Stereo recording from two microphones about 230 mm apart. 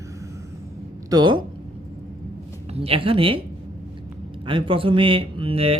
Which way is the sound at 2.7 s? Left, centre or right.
Right.